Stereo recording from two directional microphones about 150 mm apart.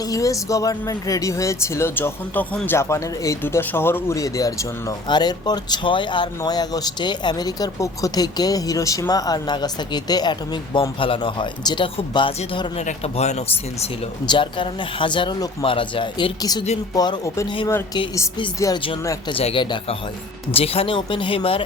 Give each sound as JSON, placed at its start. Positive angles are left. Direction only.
{"t": 0.0, "sound": "speech", "side_deg": 20}
{"t": 14.3, "sound": "speech", "side_deg": 30}
{"t": 18.6, "sound": "speech", "side_deg": 30}